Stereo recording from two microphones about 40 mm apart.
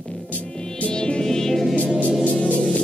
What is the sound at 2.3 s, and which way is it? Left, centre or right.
Music, left.